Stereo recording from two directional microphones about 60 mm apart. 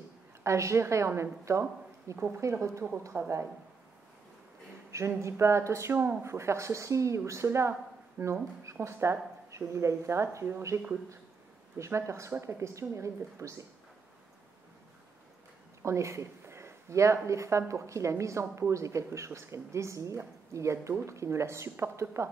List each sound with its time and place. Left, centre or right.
0.4 s a woman's voice: right
3.0 s speech: right
4.9 s speech: right
11.8 s speech: right
15.8 s speech: right